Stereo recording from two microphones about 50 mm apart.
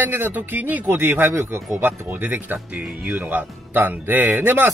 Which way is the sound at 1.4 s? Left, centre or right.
Right.